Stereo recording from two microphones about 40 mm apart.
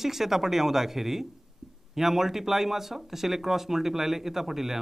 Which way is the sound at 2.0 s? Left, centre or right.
Centre.